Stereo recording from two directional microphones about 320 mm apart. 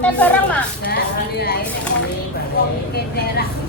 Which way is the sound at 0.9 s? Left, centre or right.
Left.